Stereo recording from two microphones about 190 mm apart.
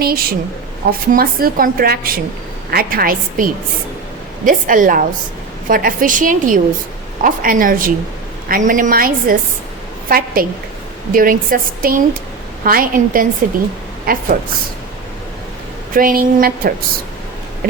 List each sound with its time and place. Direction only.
0.0 s a woman's voice: 50° right (ahead or behind)
16.0 s a woman's voice: 50° right (ahead or behind)